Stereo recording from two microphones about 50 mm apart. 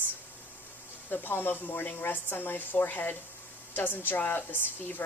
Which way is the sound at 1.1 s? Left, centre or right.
Left.